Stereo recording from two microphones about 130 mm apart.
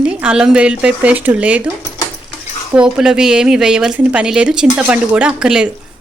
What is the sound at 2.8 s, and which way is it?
A woman's voice, 5° right (ahead or behind).